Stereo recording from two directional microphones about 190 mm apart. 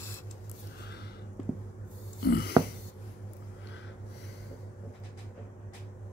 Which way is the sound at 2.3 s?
55° left (ahead or behind).